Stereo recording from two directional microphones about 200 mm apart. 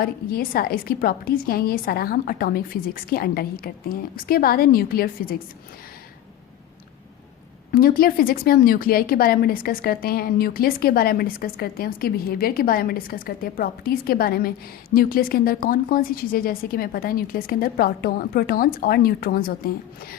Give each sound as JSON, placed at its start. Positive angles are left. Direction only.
{"t": 0.0, "sound": "a woman's voice", "side_deg": 50}
{"t": 7.7, "sound": "a woman's voice", "side_deg": 50}